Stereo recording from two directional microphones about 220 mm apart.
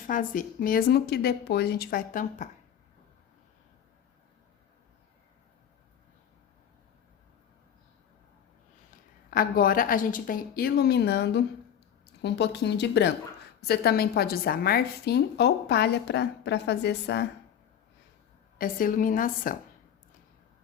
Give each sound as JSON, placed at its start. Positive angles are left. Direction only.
{"t": 0.1, "sound": "a woman's voice", "side_deg": 35}
{"t": 9.3, "sound": "a woman's voice", "side_deg": 40}
{"t": 18.5, "sound": "a woman's voice", "side_deg": 40}